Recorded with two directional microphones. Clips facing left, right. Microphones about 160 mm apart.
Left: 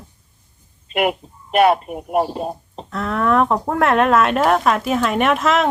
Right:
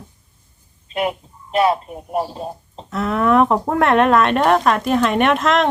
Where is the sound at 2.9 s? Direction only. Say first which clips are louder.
Right 2 dB; 5° right (ahead or behind).